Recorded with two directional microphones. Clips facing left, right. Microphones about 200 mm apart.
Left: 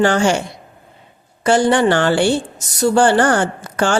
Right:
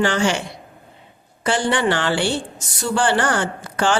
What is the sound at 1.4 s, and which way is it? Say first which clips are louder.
A woman's voice: left 6 dB; 45° left (ahead or behind).